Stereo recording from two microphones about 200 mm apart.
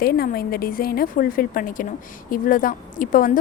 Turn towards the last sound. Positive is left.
turn(degrees=45)  # may be behind; listen again after turning